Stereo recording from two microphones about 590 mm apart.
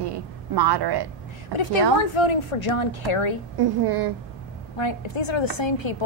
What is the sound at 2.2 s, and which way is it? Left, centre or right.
A woman's voice, left.